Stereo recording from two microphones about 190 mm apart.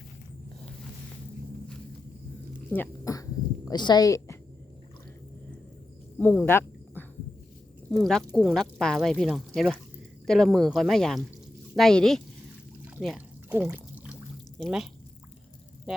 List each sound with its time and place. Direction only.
2.6 s speech: 10° left (ahead or behind)
6.1 s speech: 10° left (ahead or behind)
8.0 s speech: centre (ahead or behind)
13.0 s pour: 5° right (ahead or behind)
14.6 s speech: centre (ahead or behind)